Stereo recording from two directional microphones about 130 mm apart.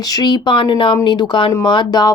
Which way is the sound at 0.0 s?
30° left (ahead or behind).